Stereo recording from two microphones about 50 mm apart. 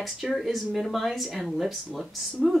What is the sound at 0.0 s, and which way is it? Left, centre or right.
Speech, centre.